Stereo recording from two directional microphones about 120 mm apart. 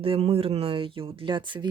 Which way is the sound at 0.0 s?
55° right (ahead or behind).